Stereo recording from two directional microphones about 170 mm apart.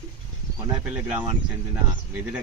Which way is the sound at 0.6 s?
10° right (ahead or behind).